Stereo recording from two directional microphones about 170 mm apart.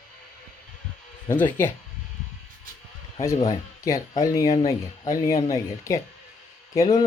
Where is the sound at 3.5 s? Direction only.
20° left (ahead or behind).